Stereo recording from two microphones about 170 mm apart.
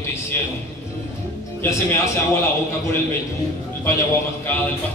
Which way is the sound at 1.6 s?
15° left (ahead or behind).